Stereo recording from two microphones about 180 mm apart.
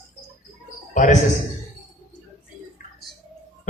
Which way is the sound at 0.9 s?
40° left (ahead or behind).